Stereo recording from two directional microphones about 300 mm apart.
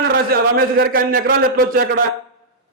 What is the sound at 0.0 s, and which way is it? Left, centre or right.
A man's voice, right.